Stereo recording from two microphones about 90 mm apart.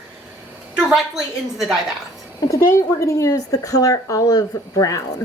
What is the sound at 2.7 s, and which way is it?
Speech, 35° left (ahead or behind).